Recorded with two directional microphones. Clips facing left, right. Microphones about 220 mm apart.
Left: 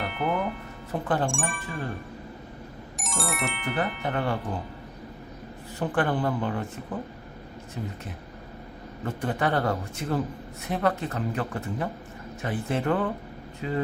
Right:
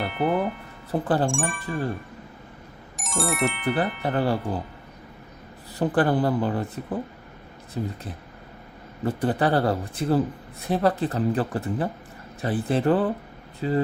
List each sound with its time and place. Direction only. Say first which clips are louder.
0.0 s speech: right 4 dB; centre (ahead or behind)
0.9 s speech: right 4 dB; 35° right (ahead or behind)
1.3 s speech: right 4 dB; centre (ahead or behind)
3.0 s speech: right 6 dB; centre (ahead or behind)
4.0 s speech: right 4 dB; 35° right (ahead or behind)
5.8 s speech: right 4 dB; 35° right (ahead or behind)
7.8 s speech: right 6 dB; 35° right (ahead or behind)
9.0 s speech: right 5 dB; 35° right (ahead or behind)